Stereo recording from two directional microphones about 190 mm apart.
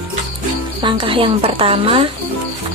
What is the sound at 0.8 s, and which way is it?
A woman's voice, 25° right (ahead or behind).